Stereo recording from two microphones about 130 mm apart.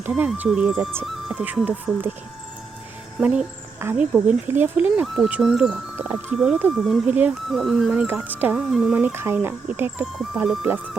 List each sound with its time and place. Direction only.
0.0 s speech: 15° right (ahead or behind)
3.2 s speech: 10° right (ahead or behind)
5.0 s speech: centre (ahead or behind)
6.0 s speech: 15° right (ahead or behind)
6.3 s speech: 5° right (ahead or behind)
7.1 s speech: 10° right (ahead or behind)
7.4 s speech: centre (ahead or behind)
8.5 s speech: centre (ahead or behind)
10.2 s speech: centre (ahead or behind)